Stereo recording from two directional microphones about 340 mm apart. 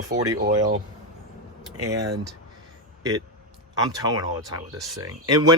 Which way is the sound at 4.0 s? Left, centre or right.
Centre.